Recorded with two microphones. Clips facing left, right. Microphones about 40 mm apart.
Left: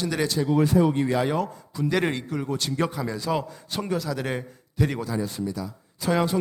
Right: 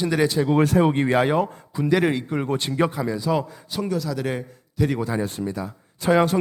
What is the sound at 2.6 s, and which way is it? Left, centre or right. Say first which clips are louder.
Speech: right 4 dB; right.